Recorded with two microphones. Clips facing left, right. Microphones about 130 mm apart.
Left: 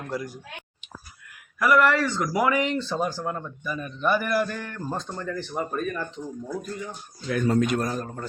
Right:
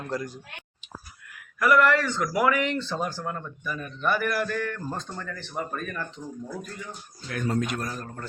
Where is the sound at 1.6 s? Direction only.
15° left (ahead or behind).